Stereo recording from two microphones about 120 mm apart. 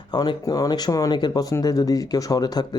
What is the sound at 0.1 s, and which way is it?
Speech, 35° left (ahead or behind).